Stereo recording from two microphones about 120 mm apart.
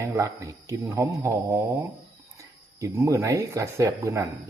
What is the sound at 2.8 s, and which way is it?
Speech, 25° right (ahead or behind).